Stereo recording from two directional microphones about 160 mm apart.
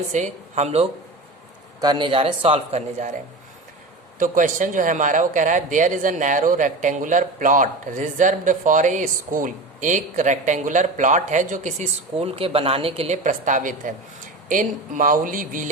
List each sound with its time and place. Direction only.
0.1 s a man's voice: 45° right (ahead or behind)
1.8 s speech: 25° right (ahead or behind)
4.2 s a man's voice: 55° right (ahead or behind); by 13.1 s 35° right (ahead or behind)
13.2 s a man's voice: 55° right (ahead or behind)